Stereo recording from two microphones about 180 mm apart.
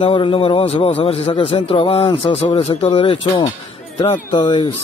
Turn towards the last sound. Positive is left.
turn(degrees=25)  # may be behind; listen again after turning